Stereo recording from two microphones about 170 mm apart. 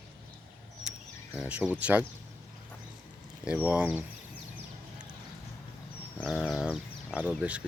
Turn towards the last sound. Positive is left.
turn(degrees=-10)  # may be behind; listen again after turning